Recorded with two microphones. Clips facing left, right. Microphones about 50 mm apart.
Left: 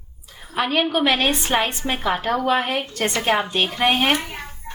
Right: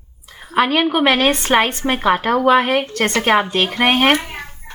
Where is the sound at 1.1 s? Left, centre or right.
Right.